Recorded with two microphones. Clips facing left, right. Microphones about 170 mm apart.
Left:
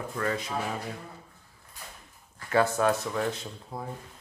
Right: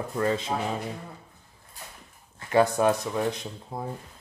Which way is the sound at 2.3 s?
20° right (ahead or behind).